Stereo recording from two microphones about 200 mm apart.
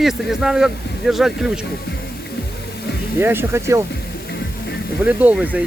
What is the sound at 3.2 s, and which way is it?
Speech, 10° right (ahead or behind).